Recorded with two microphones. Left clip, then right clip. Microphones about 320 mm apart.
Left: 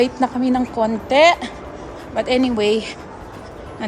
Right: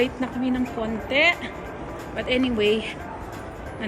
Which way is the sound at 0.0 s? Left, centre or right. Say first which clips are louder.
Left 7 dB; centre.